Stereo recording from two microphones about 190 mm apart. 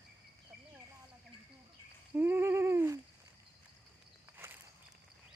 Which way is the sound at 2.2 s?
10° right (ahead or behind).